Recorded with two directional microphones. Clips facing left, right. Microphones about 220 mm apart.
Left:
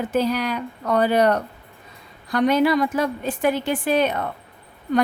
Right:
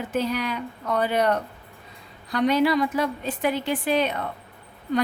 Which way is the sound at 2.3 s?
50° left (ahead or behind).